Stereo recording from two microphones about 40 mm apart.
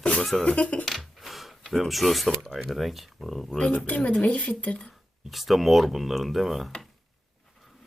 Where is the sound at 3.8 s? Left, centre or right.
Left.